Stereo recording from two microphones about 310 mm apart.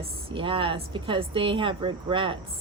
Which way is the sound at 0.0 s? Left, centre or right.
Centre.